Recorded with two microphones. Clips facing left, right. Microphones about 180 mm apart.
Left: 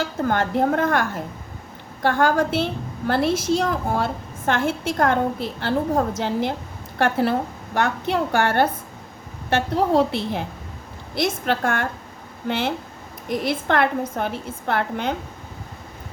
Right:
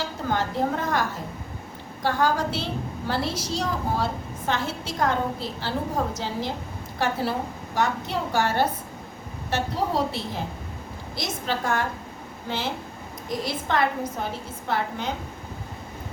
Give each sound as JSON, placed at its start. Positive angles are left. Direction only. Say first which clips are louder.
{"t": 0.2, "sound": "a woman's voice", "louder": "left 5 dB", "side_deg": 55}